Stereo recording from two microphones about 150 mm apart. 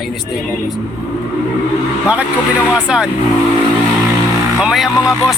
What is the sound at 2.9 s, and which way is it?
Speech, 5° right (ahead or behind).